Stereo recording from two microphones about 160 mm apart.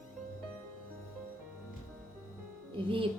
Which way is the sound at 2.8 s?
35° right (ahead or behind).